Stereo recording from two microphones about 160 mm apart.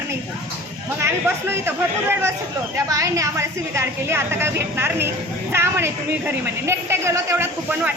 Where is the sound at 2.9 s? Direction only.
20° right (ahead or behind).